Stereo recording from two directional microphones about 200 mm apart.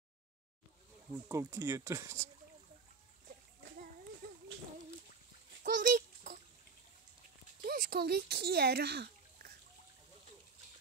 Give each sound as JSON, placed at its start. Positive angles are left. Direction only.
{"t": 1.3, "sound": "speech", "side_deg": -15}
{"t": 5.6, "sound": "a sound", "side_deg": -40}
{"t": 7.6, "sound": "speech", "side_deg": -45}